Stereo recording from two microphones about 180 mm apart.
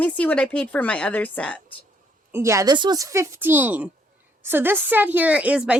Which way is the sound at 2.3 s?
15° right (ahead or behind).